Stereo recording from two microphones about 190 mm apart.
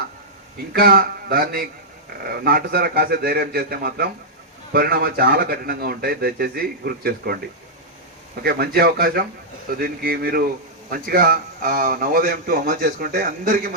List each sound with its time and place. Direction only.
0.7 s speech: 55° right (ahead or behind)
8.4 s speech: 55° right (ahead or behind)